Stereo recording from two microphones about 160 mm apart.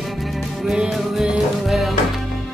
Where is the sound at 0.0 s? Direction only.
Centre (ahead or behind).